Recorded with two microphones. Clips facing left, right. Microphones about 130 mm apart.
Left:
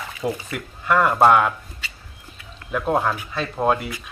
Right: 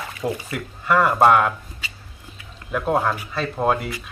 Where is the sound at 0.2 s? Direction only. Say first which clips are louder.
Even; centre (ahead or behind).